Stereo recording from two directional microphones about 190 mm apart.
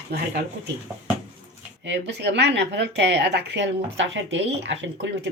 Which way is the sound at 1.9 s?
65° right (ahead or behind).